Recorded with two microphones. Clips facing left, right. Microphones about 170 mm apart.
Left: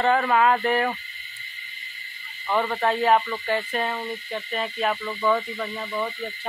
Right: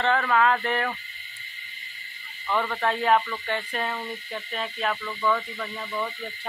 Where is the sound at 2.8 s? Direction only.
5° left (ahead or behind).